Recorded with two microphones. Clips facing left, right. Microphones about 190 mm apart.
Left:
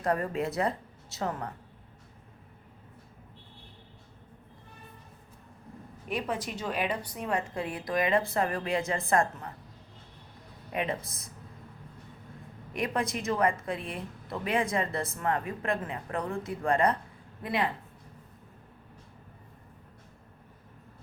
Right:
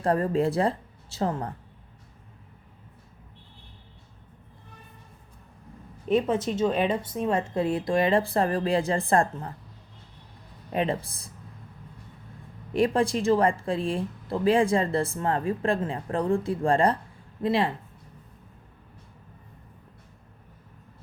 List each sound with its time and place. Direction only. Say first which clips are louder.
0.0 s a woman's voice: right 6 dB; 30° right (ahead or behind)
6.1 s a woman's voice: right 9 dB; 25° right (ahead or behind)
10.7 s speech: right 5 dB; 30° right (ahead or behind)
12.7 s a woman's voice: right 8 dB; 30° right (ahead or behind)